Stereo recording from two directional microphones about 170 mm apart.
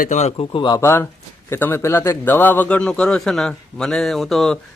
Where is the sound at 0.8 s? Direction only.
15° left (ahead or behind).